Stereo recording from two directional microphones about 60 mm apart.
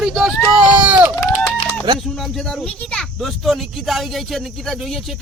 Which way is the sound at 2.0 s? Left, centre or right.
Centre.